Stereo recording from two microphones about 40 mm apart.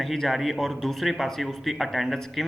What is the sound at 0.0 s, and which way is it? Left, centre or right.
Speech, centre.